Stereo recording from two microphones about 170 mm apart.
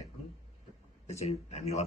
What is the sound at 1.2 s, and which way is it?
Speech, 40° left (ahead or behind).